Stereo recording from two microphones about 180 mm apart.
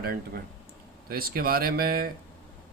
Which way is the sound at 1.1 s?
55° right (ahead or behind).